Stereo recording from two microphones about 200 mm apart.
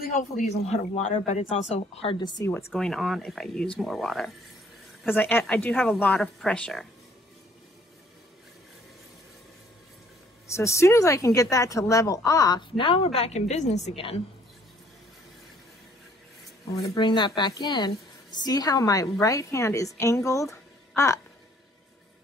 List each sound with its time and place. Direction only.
0.1 s speech: 35° left (ahead or behind); by 2.5 s 20° left (ahead or behind)
2.5 s a woman's voice: 5° left (ahead or behind)
10.4 s a woman's voice: 15° left (ahead or behind); by 14.2 s 30° left (ahead or behind)
16.7 s a woman's voice: 20° left (ahead or behind)
20.9 s a sound: 15° left (ahead or behind)